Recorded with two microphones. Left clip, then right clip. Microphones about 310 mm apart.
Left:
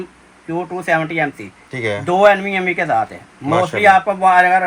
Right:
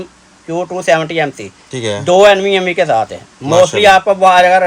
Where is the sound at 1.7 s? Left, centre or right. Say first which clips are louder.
Right 2 dB; centre.